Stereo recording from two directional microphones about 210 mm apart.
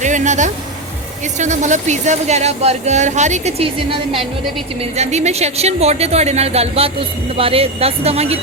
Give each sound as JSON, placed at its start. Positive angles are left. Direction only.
{"t": 0.0, "sound": "speech", "side_deg": -35}